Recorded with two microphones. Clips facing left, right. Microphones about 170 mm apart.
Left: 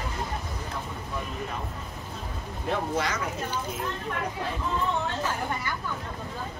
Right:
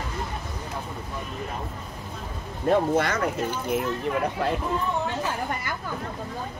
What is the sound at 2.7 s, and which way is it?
Speech, 55° right (ahead or behind).